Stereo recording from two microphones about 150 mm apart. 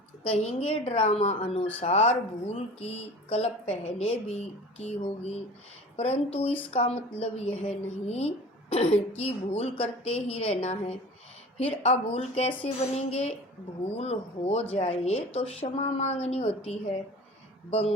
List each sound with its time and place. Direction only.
0.3 s a woman's voice: 40° left (ahead or behind)